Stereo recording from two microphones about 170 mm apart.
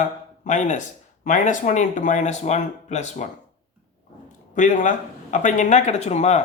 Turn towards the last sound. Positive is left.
turn(degrees=40)  # may be behind; listen again after turning